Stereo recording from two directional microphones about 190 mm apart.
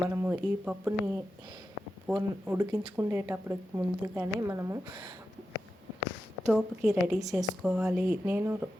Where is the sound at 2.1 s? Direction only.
15° right (ahead or behind).